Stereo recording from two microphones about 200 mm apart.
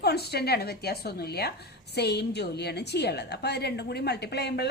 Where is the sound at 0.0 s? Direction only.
55° left (ahead or behind).